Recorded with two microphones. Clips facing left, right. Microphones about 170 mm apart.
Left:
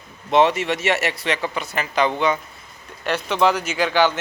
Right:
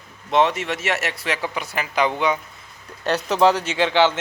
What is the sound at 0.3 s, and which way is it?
A man's voice, centre (ahead or behind).